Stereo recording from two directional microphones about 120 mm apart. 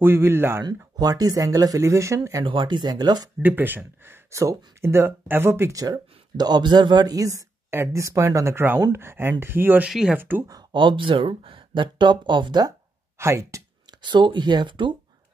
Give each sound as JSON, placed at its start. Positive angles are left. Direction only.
{"t": 0.0, "sound": "speech", "side_deg": -20}
{"t": 0.9, "sound": "speech", "side_deg": -30}
{"t": 2.4, "sound": "speech", "side_deg": -40}
{"t": 3.4, "sound": "speech", "side_deg": -15}
{"t": 10.1, "sound": "speech", "side_deg": -15}
{"t": 10.5, "sound": "speech", "side_deg": -40}
{"t": 13.2, "sound": "a sound", "side_deg": -25}
{"t": 14.0, "sound": "speech", "side_deg": -40}